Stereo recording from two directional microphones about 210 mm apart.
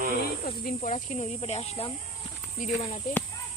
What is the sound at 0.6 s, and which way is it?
Speech, 35° left (ahead or behind).